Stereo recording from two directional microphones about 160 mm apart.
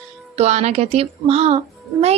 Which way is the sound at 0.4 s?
45° right (ahead or behind).